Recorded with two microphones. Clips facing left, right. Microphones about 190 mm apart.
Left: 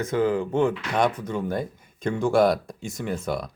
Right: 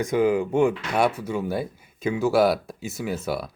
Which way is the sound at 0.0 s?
15° right (ahead or behind).